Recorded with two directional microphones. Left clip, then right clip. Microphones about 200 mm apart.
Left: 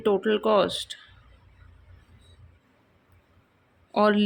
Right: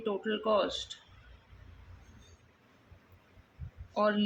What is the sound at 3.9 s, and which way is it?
Speech, 45° left (ahead or behind).